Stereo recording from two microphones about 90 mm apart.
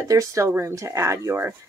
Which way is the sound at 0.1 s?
40° right (ahead or behind).